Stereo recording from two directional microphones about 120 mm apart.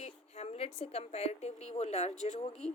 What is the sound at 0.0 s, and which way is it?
A woman's voice, 60° left (ahead or behind).